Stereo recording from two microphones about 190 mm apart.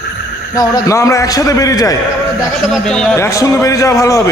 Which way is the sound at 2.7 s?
Centre (ahead or behind).